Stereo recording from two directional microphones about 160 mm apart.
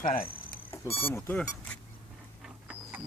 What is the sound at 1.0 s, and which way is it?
Speech, 15° left (ahead or behind).